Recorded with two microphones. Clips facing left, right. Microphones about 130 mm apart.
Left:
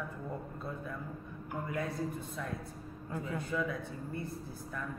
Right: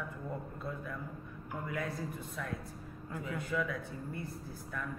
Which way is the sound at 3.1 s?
30° left (ahead or behind).